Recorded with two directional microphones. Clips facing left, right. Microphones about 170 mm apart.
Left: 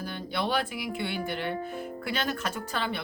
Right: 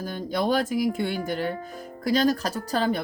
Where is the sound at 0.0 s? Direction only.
45° right (ahead or behind).